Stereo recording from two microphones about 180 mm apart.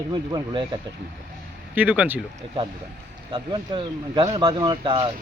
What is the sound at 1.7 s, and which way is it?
Speech, 10° right (ahead or behind).